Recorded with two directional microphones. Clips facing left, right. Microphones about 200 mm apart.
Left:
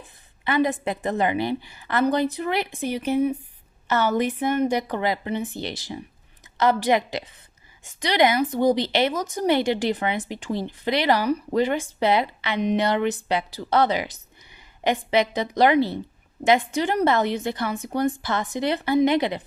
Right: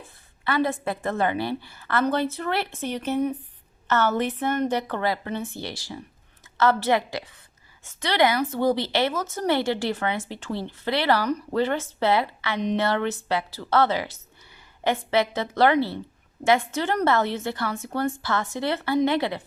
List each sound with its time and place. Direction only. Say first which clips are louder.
0.0 s speech: left 1 dB; 20° left (ahead or behind)